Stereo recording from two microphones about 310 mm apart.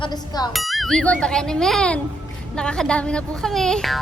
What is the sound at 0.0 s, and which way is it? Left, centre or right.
Speech, centre.